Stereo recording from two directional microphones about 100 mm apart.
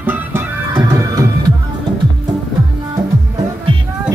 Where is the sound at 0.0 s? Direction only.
20° right (ahead or behind).